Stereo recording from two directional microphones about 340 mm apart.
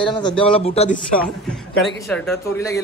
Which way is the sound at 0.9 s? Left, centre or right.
Centre.